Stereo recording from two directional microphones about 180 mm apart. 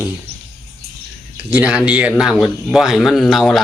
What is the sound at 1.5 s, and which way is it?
Speech, 5° right (ahead or behind).